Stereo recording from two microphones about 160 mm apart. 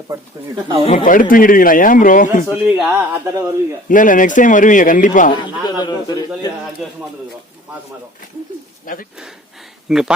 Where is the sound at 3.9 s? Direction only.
55° left (ahead or behind).